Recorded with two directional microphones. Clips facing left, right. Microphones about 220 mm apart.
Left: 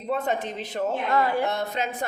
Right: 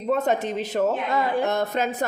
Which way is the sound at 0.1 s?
45° right (ahead or behind).